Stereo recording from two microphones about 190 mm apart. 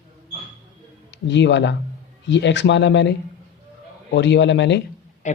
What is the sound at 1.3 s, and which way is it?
Speech, 70° left (ahead or behind).